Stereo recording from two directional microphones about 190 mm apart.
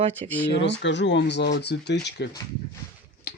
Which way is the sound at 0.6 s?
70° left (ahead or behind).